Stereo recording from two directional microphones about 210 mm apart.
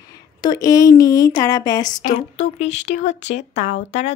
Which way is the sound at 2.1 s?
30° left (ahead or behind).